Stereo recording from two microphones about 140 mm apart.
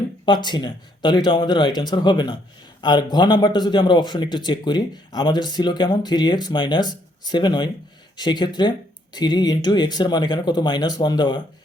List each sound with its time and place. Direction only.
0.3 s speech: 30° left (ahead or behind)